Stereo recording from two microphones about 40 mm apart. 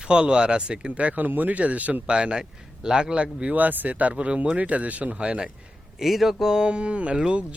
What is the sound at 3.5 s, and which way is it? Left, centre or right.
Speech, right.